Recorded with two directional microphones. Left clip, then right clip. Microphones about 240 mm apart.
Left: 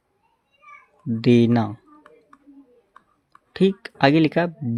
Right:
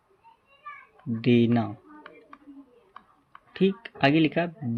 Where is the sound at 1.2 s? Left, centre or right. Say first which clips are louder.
Left 5 dB; left.